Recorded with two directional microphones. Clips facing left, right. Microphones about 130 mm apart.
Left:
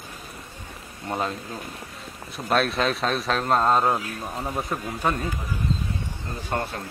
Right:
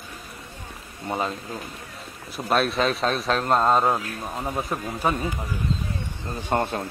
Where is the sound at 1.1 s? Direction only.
Centre (ahead or behind).